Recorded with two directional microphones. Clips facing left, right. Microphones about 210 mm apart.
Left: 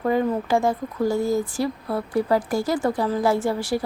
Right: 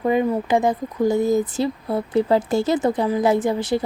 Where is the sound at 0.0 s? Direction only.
15° right (ahead or behind).